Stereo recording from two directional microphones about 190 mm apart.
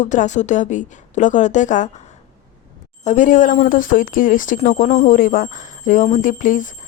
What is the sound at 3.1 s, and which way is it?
A woman's voice, 40° left (ahead or behind).